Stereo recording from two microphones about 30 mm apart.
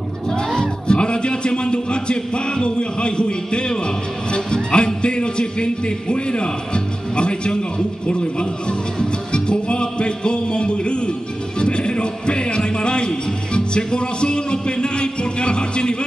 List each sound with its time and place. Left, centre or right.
0.6 s music: left